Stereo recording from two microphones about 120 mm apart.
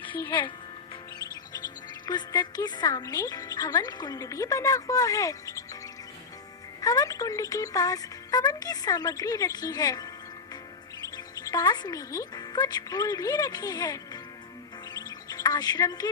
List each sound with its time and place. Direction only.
0.0 s speech: 40° left (ahead or behind)
2.0 s speech: 35° left (ahead or behind)
6.8 s speech: 30° left (ahead or behind)
14.9 s music: 30° left (ahead or behind)